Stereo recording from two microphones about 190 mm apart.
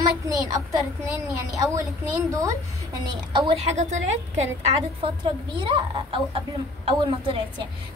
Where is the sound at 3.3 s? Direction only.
30° right (ahead or behind).